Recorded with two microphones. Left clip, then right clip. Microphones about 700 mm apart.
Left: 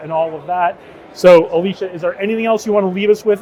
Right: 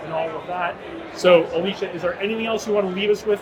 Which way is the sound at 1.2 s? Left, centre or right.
Left.